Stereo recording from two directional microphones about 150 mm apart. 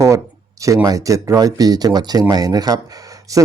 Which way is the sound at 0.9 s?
20° right (ahead or behind).